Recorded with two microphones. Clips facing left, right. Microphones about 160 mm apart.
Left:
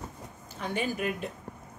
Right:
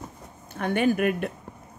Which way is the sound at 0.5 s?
60° right (ahead or behind).